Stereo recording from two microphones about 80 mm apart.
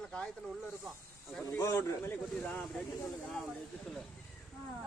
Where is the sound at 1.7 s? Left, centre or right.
Left.